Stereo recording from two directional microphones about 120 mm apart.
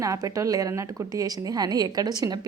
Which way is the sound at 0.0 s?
30° right (ahead or behind).